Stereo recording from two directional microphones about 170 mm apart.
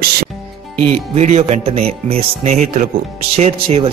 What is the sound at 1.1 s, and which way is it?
Speech, 40° right (ahead or behind).